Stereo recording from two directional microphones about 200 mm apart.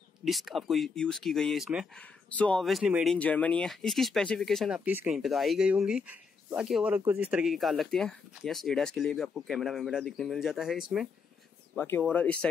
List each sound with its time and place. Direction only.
0.2 s speech: centre (ahead or behind)
11.7 s speech: 10° left (ahead or behind)